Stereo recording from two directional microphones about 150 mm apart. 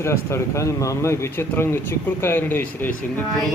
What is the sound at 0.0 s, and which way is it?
Speech, 20° left (ahead or behind).